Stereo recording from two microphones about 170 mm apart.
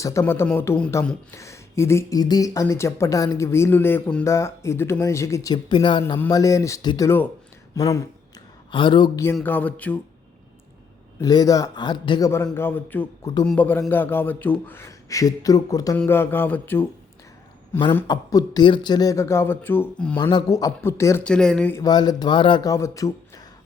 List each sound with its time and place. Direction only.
0.0 s speech: 15° left (ahead or behind)
6.1 s speech: 15° left (ahead or behind)
9.2 s speech: 15° left (ahead or behind)
11.2 s speech: 20° left (ahead or behind)
12.5 s speech: 10° left (ahead or behind)
20.3 s speech: 20° left (ahead or behind)
21.2 s speech: 5° left (ahead or behind)
21.8 s speech: 25° left (ahead or behind)